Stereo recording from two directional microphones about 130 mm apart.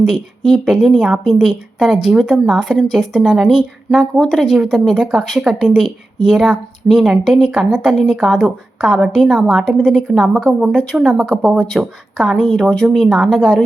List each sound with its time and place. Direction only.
0.0 s speech: centre (ahead or behind)